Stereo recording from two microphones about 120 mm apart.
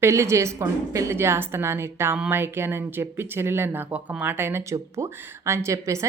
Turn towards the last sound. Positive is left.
turn(degrees=-25)  # may be behind; listen again after turning